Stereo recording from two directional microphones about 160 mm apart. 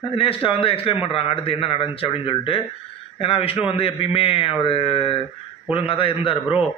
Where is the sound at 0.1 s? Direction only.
35° left (ahead or behind).